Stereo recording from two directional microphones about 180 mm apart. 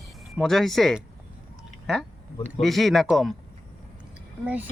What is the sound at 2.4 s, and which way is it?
Speech, centre (ahead or behind).